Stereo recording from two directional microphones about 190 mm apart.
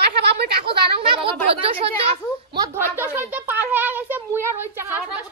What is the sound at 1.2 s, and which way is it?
Speech, 30° right (ahead or behind).